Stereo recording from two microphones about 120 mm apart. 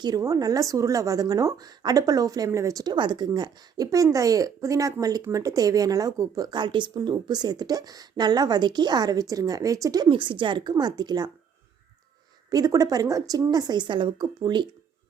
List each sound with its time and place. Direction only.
0.0 s speech: 30° right (ahead or behind)
10.1 s speech: 45° right (ahead or behind)
12.5 s speech: 30° right (ahead or behind)